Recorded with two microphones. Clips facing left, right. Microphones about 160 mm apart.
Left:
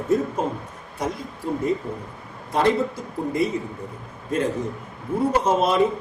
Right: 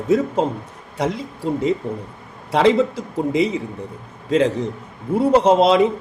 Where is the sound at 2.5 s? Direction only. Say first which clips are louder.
Right 5 dB; 90° right.